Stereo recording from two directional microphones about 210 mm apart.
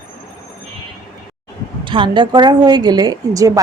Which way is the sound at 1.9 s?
25° right (ahead or behind).